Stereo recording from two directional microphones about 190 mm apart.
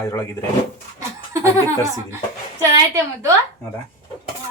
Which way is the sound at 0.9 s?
15° right (ahead or behind).